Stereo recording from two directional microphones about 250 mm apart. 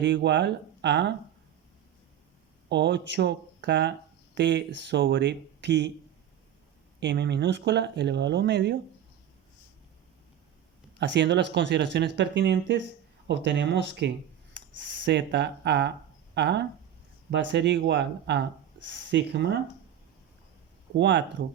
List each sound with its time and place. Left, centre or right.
0.0 s speech: right
2.6 s speech: right
7.0 s speech: right
11.0 s speech: right
20.9 s speech: right